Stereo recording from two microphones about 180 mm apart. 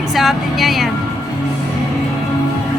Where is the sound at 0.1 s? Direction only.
Centre (ahead or behind).